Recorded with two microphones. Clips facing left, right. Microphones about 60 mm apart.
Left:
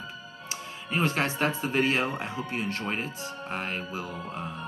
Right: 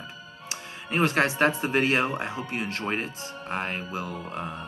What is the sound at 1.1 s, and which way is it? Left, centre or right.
Speech, right.